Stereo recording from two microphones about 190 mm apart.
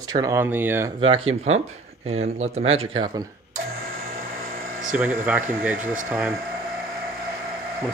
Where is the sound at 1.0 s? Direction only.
30° right (ahead or behind).